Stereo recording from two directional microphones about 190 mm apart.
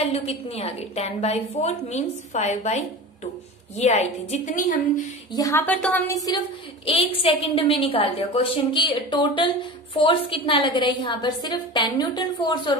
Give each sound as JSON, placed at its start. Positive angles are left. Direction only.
{"t": 0.0, "sound": "a woman's voice", "side_deg": 35}
{"t": 5.3, "sound": "a woman's voice", "side_deg": 15}
{"t": 6.9, "sound": "a woman's voice", "side_deg": 30}